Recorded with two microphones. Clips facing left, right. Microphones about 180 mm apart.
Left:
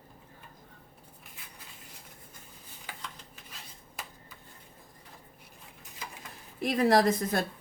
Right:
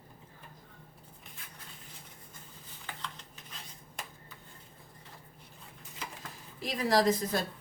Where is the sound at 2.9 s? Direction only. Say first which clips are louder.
Even; 10° left (ahead or behind).